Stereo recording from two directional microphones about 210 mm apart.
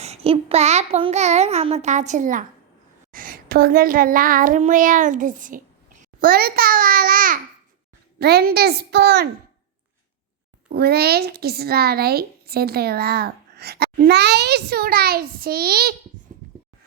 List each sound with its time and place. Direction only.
0.0 s a child's voice: 30° right (ahead or behind)
3.1 s child singing: 40° right (ahead or behind)
8.2 s speech: 50° right (ahead or behind)
10.7 s speech: 50° right (ahead or behind)